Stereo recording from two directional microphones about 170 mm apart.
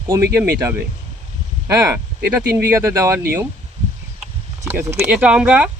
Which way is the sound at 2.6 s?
15° right (ahead or behind).